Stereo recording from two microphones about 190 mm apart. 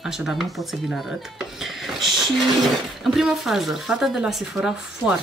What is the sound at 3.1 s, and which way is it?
Speech, centre (ahead or behind).